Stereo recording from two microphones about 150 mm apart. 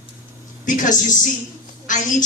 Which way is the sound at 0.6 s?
60° left (ahead or behind).